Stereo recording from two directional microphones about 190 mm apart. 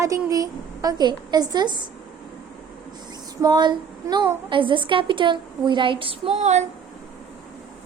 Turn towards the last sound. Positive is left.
turn(degrees=-35)  # may be behind; listen again after turning